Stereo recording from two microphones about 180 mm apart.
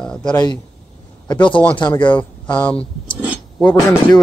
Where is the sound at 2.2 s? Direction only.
10° left (ahead or behind).